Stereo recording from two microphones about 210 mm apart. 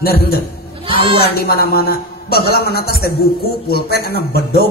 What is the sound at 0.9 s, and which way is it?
Speech, 25° right (ahead or behind).